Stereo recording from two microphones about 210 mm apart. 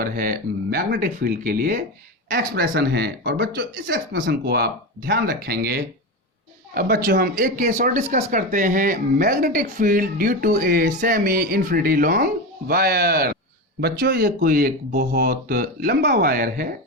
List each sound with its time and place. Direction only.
0.0 s speech: 40° right (ahead or behind)